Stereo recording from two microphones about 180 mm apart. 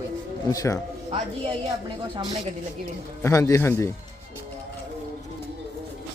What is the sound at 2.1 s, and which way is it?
Speech, 25° right (ahead or behind).